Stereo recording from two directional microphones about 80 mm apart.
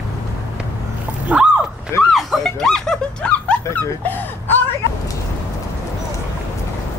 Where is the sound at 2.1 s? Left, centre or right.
Centre.